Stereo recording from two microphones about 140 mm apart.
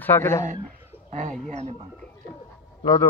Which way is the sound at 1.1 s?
55° right (ahead or behind).